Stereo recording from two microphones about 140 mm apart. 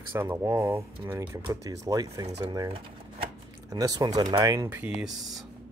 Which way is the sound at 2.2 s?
50° right (ahead or behind).